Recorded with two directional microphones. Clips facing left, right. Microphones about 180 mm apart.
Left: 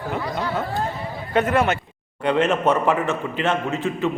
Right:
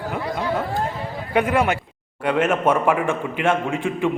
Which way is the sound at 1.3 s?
10° right (ahead or behind).